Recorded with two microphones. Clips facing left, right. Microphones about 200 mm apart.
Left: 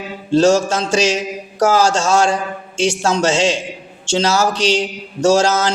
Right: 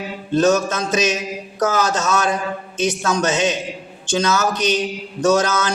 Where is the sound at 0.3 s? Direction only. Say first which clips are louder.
Left 3 dB; 30° left (ahead or behind).